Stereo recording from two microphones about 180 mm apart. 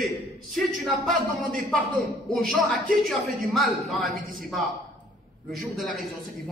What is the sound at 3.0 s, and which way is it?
A man's voice, centre (ahead or behind).